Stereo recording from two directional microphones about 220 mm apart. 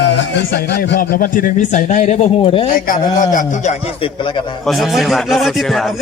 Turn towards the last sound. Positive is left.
turn(degrees=0)  # may be behind; listen again after turning